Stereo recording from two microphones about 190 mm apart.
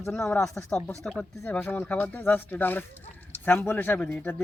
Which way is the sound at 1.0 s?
5° left (ahead or behind).